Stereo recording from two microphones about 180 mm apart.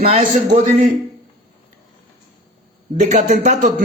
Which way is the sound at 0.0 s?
40° right (ahead or behind).